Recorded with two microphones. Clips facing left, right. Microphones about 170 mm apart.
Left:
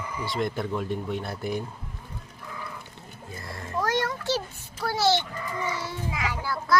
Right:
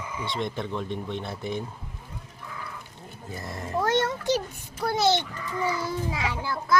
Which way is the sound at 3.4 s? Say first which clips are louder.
Right 2 dB; 20° right (ahead or behind).